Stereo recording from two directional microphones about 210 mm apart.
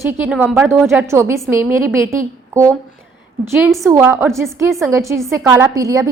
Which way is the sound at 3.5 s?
5° right (ahead or behind).